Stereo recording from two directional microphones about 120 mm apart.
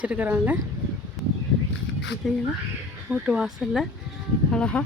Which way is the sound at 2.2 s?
Centre (ahead or behind).